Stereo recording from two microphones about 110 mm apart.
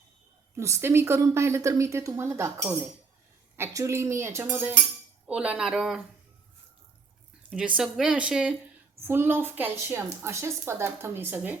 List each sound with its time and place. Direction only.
0.5 s a woman's voice: 25° right (ahead or behind)
5.3 s speech: 10° right (ahead or behind)
7.8 s speech: 5° right (ahead or behind)
9.0 s a woman's voice: 20° right (ahead or behind)